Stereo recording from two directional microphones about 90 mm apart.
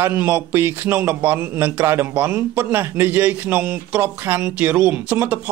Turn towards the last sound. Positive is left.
turn(degrees=-15)  # may be behind; listen again after turning